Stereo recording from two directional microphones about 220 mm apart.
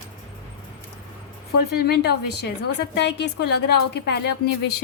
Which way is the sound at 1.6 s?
45° left (ahead or behind).